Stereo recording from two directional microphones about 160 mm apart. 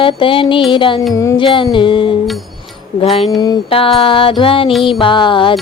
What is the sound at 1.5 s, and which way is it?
Music, 30° left (ahead or behind).